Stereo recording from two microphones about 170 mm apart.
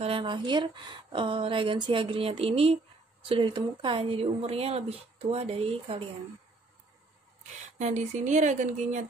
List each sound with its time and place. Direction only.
0.0 s speech: 30° right (ahead or behind)
7.8 s speech: 45° right (ahead or behind)